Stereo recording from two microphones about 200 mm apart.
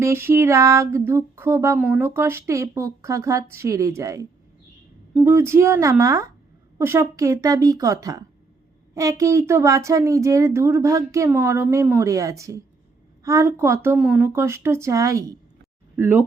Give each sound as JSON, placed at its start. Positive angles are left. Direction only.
{"t": 0.0, "sound": "speech", "side_deg": -10}